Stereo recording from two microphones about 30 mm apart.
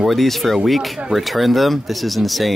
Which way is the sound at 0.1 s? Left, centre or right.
Centre.